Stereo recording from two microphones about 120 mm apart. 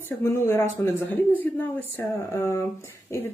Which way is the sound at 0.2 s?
20° left (ahead or behind).